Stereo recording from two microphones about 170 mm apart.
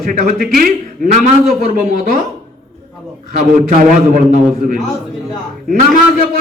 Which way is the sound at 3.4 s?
50° right (ahead or behind).